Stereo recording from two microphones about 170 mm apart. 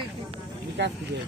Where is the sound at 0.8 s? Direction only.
85° right.